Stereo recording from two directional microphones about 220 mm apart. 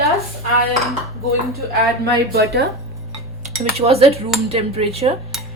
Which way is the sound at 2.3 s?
45° right (ahead or behind).